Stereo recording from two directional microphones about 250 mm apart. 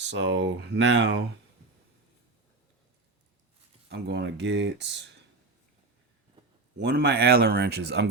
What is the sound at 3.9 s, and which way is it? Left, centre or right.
Speech, right.